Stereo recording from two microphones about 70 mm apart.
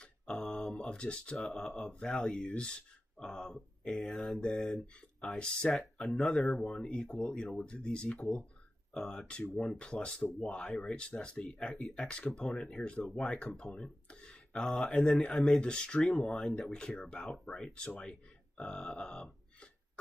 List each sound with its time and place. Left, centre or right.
0.0 s a sound: centre
1.4 s speech: centre
11.0 s speech: centre
15.6 s speech: centre
16.1 s speech: centre
18.6 s burping: centre